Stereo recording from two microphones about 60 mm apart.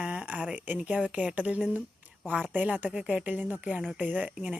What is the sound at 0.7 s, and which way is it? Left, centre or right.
Speech, right.